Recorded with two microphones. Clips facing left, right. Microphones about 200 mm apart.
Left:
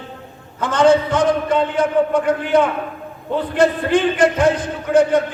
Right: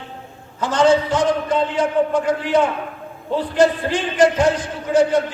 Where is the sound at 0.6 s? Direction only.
55° left (ahead or behind).